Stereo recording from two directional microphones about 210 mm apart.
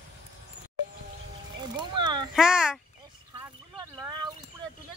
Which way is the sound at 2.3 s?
5° right (ahead or behind).